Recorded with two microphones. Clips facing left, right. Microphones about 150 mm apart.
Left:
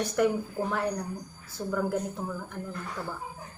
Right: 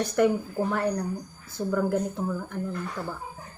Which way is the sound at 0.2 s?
Centre (ahead or behind).